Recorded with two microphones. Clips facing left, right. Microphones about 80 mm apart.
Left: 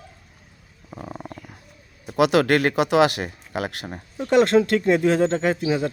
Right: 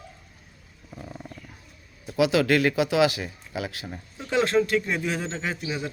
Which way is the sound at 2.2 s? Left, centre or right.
Left.